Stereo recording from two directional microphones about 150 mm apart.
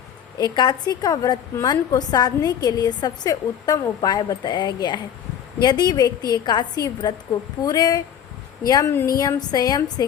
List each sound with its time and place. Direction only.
0.3 s a woman's voice: 25° left (ahead or behind)